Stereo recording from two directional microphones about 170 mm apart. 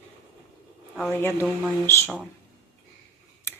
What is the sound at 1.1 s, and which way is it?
Speech, 10° left (ahead or behind).